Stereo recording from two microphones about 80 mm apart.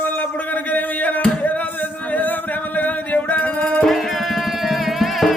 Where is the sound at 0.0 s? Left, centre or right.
Left.